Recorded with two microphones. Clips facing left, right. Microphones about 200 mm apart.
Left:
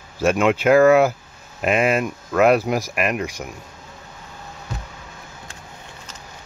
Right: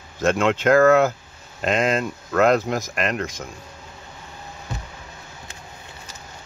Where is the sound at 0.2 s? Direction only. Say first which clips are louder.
Left 2 dB; 10° left (ahead or behind).